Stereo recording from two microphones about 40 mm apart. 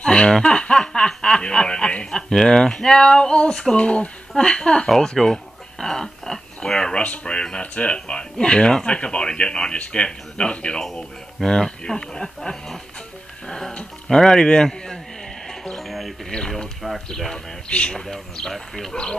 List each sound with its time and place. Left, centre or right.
0.0 s speech: left
0.7 s snicker: centre
2.0 s speech: centre
3.8 s speech: left
4.8 s speech: centre
7.6 s speech: left
8.1 s speech: left
15.4 s music: centre
15.8 s music: centre
16.3 s speech: centre
17.6 s speech: left